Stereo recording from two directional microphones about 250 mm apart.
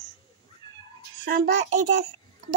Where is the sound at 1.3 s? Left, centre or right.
Right.